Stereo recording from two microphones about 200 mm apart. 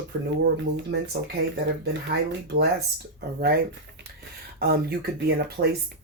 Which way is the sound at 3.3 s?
50° right (ahead or behind).